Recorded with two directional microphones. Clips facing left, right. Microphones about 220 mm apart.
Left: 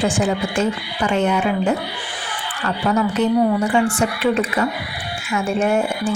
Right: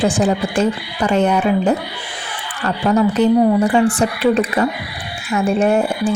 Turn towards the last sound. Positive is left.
turn(degrees=-35)  # may be behind; listen again after turning